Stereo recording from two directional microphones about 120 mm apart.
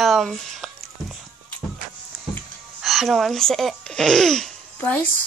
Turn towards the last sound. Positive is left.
turn(degrees=10)  # may be behind; listen again after turning